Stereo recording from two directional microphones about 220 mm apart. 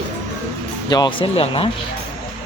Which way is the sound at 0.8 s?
20° left (ahead or behind).